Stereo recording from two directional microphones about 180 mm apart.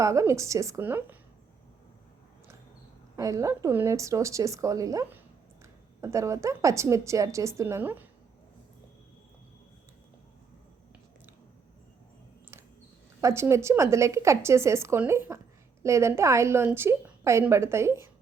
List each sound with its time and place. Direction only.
0.0 s a woman's voice: 15° right (ahead or behind)
3.2 s a woman's voice: 20° right (ahead or behind)
13.2 s a woman's voice: 15° right (ahead or behind)